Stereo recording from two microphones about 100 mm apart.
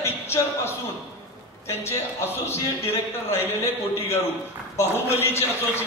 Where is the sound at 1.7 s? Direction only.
25° left (ahead or behind).